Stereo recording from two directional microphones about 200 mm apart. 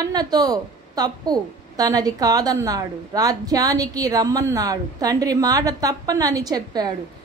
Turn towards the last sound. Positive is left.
turn(degrees=-20)  # may be behind; listen again after turning